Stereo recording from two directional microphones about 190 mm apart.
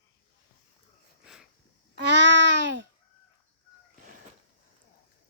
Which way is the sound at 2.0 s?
70° right (ahead or behind).